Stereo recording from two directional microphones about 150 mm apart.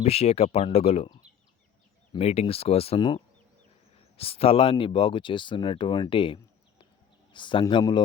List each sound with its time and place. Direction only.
0.0 s speech: 45° left (ahead or behind)
2.1 s speech: 45° left (ahead or behind)
4.2 s speech: 40° left (ahead or behind)